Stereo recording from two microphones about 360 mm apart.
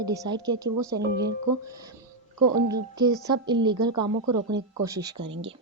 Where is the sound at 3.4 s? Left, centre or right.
Centre.